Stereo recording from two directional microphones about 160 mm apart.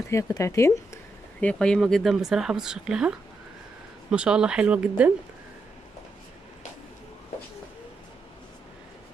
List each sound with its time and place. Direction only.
0.1 s speech: 20° left (ahead or behind)
1.4 s speech: 5° left (ahead or behind)